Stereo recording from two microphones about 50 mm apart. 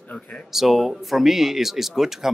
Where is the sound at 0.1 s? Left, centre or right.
Centre.